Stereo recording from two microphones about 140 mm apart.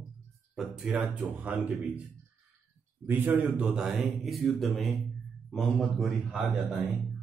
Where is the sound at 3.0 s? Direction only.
15° right (ahead or behind).